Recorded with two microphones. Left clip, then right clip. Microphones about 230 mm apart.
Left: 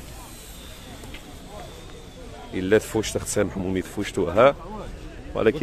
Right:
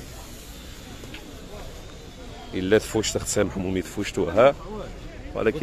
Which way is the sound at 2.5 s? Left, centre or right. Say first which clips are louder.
Even; centre.